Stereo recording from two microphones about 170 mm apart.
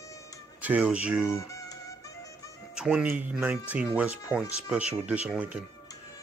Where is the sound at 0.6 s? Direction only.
10° right (ahead or behind).